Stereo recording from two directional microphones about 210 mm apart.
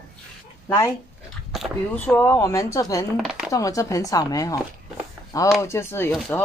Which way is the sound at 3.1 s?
Centre (ahead or behind).